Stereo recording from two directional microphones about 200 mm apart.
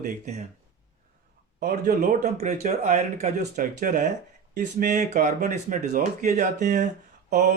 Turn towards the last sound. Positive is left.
turn(degrees=-50)  # may be behind; listen again after turning